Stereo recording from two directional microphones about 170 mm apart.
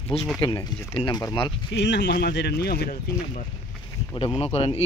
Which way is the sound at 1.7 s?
90° left.